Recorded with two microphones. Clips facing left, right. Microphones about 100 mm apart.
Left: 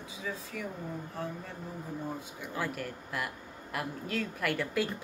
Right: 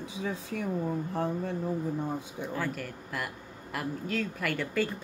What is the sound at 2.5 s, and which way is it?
A man's voice, centre (ahead or behind).